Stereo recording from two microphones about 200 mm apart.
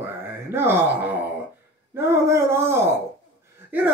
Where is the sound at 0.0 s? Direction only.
10° right (ahead or behind).